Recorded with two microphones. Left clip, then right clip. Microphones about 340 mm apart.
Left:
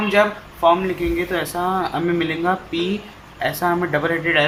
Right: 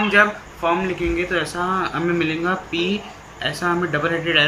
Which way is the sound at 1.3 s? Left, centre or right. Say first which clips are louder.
Even; left.